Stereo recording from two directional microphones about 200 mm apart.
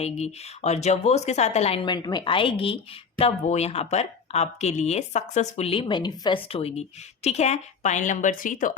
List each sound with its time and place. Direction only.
0.0 s speech: 30° left (ahead or behind)